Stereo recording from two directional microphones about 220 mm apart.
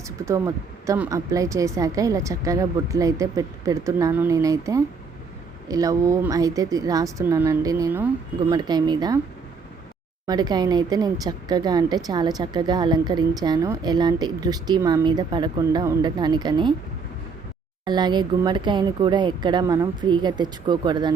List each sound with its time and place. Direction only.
0.3 s a woman's voice: 15° right (ahead or behind)
10.2 s speech: 20° right (ahead or behind)
17.8 s speech: 20° right (ahead or behind)